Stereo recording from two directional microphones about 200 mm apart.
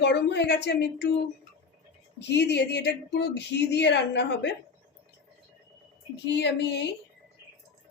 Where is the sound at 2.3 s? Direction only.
60° left (ahead or behind).